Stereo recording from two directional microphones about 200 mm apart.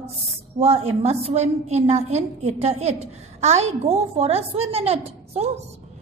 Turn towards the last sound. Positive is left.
turn(degrees=-30)  # may be behind; listen again after turning